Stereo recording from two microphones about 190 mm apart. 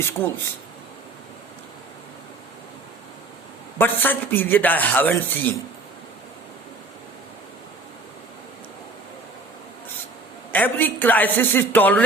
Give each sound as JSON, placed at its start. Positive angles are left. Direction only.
{"t": 3.8, "sound": "a man's voice", "side_deg": 10}
{"t": 10.5, "sound": "a man's voice", "side_deg": 10}